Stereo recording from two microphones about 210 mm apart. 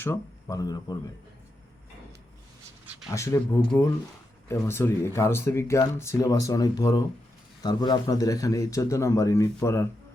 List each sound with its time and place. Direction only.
0.0 s speech: 15° left (ahead or behind)
2.8 s a sound: 5° right (ahead or behind)
3.1 s speech: 15° left (ahead or behind)